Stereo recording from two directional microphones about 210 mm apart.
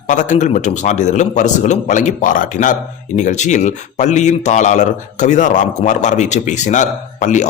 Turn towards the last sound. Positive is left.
turn(degrees=35)  # may be behind; listen again after turning